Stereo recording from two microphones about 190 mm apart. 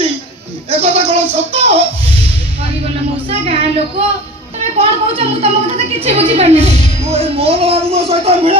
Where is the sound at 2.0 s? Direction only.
30° right (ahead or behind).